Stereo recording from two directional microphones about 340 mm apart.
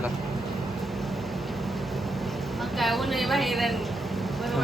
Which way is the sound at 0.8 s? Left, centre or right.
Centre.